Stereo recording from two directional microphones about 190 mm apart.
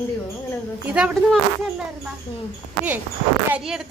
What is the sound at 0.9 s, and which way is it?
Speech, 5° right (ahead or behind).